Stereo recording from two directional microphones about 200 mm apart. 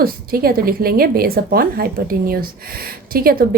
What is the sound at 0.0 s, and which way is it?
Speech, 50° right (ahead or behind).